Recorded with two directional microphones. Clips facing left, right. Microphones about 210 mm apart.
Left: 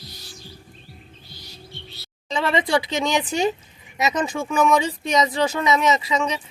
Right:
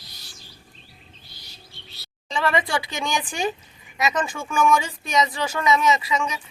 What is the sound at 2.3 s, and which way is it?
Speech, 20° left (ahead or behind).